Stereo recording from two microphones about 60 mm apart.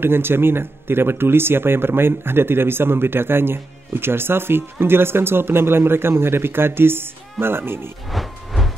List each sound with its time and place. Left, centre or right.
0.0 s speech: right
8.1 s music: centre